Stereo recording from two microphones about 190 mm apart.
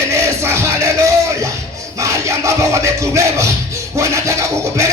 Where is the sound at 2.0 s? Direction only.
15° right (ahead or behind).